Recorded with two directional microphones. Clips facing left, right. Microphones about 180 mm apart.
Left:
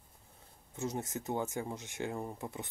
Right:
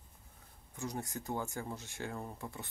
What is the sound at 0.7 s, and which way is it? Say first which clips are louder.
Speech: left 3 dB; 20° left (ahead or behind).